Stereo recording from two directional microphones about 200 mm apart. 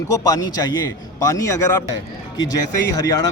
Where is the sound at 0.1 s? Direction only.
15° left (ahead or behind).